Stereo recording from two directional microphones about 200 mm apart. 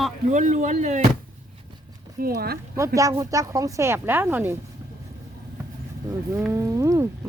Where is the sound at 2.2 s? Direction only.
50° right (ahead or behind).